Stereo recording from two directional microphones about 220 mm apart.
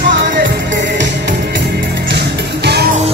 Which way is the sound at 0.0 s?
50° right (ahead or behind).